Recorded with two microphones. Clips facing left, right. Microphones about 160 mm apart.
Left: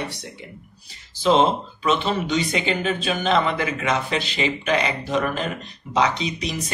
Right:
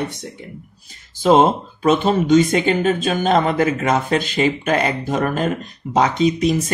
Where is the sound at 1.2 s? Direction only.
50° right (ahead or behind).